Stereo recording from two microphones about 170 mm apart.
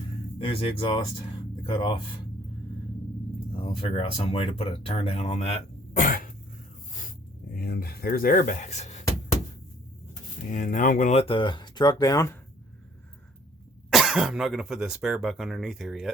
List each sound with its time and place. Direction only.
0.3 s speech: 30° left (ahead or behind)
3.5 s speech: 30° left (ahead or behind)
6.0 s speech: 55° left (ahead or behind)
7.5 s speech: 60° left (ahead or behind); by 9.0 s 45° left (ahead or behind)
10.5 s speech: 50° left (ahead or behind)
11.1 s speech: 35° left (ahead or behind)
13.9 s speech: centre (ahead or behind)